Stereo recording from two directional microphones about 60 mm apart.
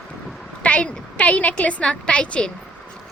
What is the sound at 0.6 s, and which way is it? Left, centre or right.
A woman's voice, left.